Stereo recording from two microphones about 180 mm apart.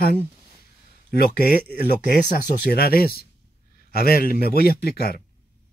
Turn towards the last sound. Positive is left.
turn(degrees=60)  # may be behind; listen again after turning